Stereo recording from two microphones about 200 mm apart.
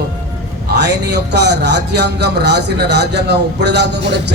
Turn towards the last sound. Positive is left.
turn(degrees=-60)  # may be behind; listen again after turning